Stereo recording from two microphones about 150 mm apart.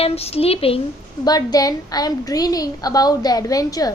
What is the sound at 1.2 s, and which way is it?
A woman's voice, 25° left (ahead or behind).